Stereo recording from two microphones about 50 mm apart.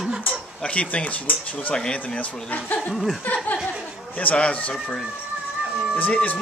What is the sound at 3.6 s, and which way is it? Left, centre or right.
Speech, left.